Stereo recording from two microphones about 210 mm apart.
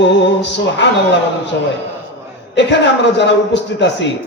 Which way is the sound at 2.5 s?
55° left (ahead or behind).